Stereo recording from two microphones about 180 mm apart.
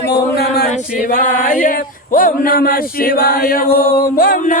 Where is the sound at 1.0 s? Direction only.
45° left (ahead or behind).